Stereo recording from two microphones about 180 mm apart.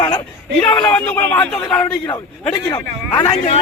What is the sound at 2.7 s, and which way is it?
Speech, 20° left (ahead or behind).